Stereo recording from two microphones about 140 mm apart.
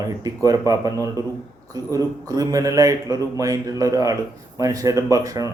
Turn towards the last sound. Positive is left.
turn(degrees=-25)  # may be behind; listen again after turning